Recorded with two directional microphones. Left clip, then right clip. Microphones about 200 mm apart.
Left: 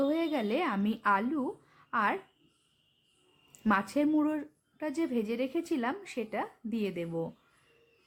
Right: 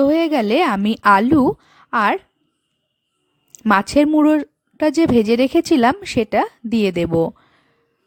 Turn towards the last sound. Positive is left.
turn(degrees=-55)  # may be behind; listen again after turning